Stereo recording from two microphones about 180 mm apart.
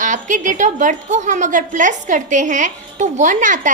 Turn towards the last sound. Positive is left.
turn(degrees=-45)  # may be behind; listen again after turning